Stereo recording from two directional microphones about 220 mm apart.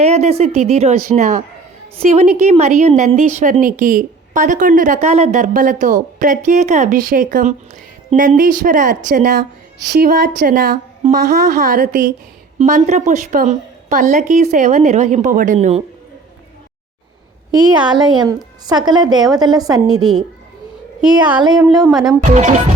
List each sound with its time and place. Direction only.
0.0 s a woman's voice: 30° right (ahead or behind)
2.4 s speech: 30° right (ahead or behind)
17.7 s a woman's voice: 20° right (ahead or behind)
21.0 s speech: 5° right (ahead or behind)
22.2 s speech: 35° right (ahead or behind)